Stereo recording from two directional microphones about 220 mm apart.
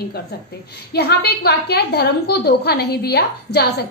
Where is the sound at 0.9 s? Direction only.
45° left (ahead or behind).